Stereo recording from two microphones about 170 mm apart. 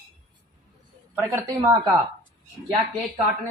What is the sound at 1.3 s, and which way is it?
Speech, 20° right (ahead or behind).